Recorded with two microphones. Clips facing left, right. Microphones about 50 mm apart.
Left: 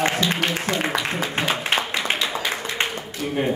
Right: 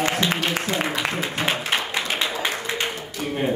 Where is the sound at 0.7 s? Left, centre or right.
Left.